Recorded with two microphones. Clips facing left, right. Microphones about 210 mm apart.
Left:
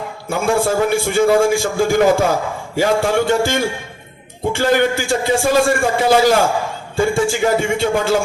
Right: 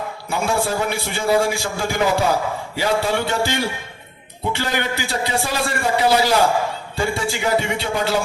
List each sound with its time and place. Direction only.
0.3 s a man's voice: 50° left (ahead or behind)